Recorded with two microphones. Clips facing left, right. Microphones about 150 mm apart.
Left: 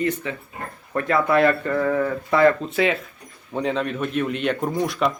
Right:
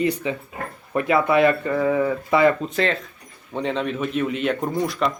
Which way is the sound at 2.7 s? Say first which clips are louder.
Left 1 dB; 5° left (ahead or behind).